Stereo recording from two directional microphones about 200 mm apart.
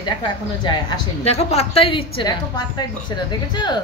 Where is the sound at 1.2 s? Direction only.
30° left (ahead or behind).